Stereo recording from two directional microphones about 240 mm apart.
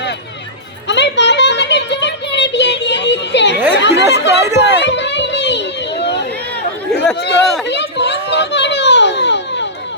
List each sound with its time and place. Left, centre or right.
0.9 s a sound: left
3.8 s chatter: left
4.6 s children playing: left
7.2 s speech: left
7.7 s children playing: left